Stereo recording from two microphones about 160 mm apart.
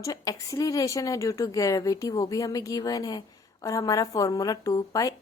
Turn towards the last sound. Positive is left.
turn(degrees=20)  # may be behind; listen again after turning